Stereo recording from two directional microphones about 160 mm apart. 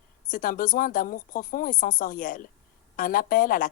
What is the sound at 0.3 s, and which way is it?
Speech, 60° left (ahead or behind).